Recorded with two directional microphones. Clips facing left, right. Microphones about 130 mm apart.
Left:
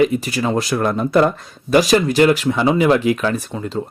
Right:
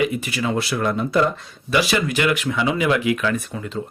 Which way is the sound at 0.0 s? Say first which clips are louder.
Left 5 dB; 40° left (ahead or behind).